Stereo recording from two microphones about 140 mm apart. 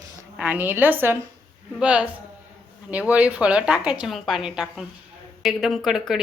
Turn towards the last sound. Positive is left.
turn(degrees=0)  # may be behind; listen again after turning